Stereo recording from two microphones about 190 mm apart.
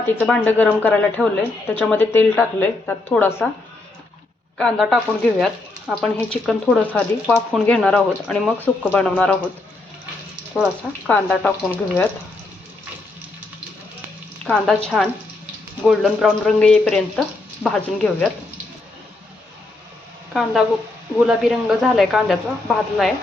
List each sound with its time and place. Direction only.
0.0 s a woman's voice: 10° left (ahead or behind)
4.5 s a woman's voice: centre (ahead or behind)
11.0 s a woman's voice: 5° left (ahead or behind)
14.4 s a woman's voice: 5° left (ahead or behind)
15.8 s speech: centre (ahead or behind)
20.3 s speech: centre (ahead or behind)